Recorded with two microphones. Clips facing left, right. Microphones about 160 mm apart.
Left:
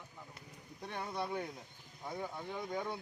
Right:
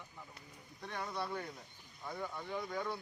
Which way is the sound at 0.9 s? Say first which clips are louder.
Left 1 dB; 25° left (ahead or behind).